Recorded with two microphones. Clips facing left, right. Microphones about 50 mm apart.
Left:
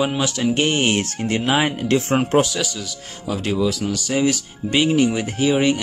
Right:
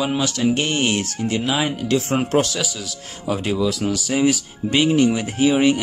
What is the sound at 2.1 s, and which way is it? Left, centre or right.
Speech, centre.